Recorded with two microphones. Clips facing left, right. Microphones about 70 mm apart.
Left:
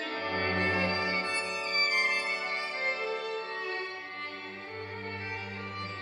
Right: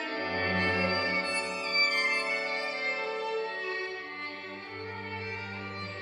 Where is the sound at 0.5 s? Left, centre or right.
Centre.